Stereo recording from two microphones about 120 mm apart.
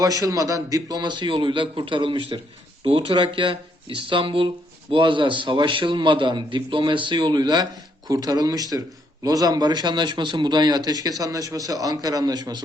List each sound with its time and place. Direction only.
0.0 s speech: 30° right (ahead or behind)